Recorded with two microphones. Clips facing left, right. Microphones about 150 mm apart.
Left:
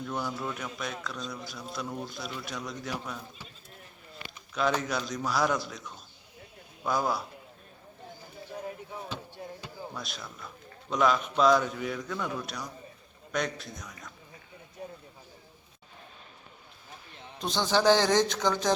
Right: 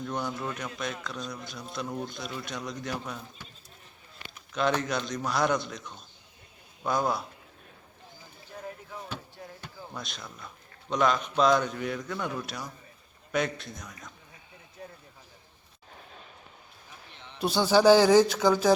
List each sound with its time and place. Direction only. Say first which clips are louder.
0.0 s speech: right 1 dB; centre (ahead or behind)
4.5 s speech: right 1 dB; centre (ahead or behind)
9.9 s speech: even; centre (ahead or behind)
14.8 s a sound: left 3 dB; 15° left (ahead or behind)
17.4 s speech: right 4 dB; 10° right (ahead or behind)